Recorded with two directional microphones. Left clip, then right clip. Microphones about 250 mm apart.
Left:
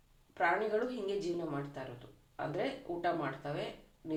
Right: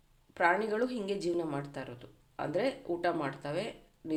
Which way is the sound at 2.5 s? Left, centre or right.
Right.